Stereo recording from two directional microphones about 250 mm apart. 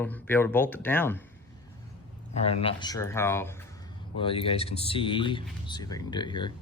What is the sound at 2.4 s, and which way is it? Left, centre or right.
Speech, left.